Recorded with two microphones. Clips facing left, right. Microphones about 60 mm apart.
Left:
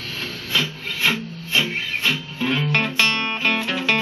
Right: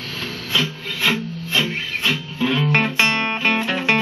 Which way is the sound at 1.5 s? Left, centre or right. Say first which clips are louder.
Even; centre.